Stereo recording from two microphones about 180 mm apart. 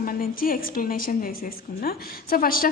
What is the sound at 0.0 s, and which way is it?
A woman's voice, 55° left (ahead or behind).